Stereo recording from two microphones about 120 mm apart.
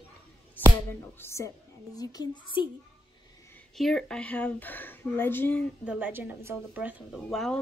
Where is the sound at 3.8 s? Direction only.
5° left (ahead or behind).